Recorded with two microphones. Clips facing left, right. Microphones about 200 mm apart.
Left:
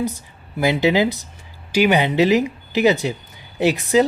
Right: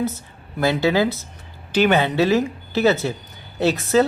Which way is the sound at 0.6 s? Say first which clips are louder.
Left 1 dB; 15° left (ahead or behind).